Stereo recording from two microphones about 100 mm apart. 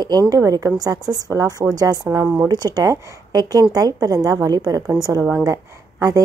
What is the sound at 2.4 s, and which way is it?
A woman's voice, 45° right (ahead or behind).